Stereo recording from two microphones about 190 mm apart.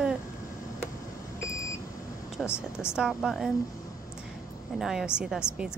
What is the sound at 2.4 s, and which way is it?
Speech, 15° left (ahead or behind).